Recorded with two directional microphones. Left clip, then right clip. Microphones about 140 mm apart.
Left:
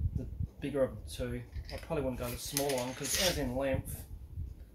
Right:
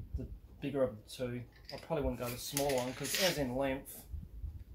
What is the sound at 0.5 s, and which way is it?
Speech, 20° right (ahead or behind).